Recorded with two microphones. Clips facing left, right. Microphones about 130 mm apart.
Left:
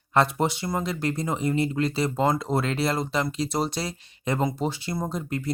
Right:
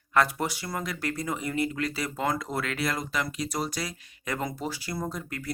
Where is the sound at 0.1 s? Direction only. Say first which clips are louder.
Left 3 dB; 25° left (ahead or behind).